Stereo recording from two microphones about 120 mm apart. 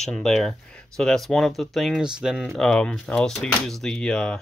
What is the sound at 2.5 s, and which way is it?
Speech, 5° left (ahead or behind).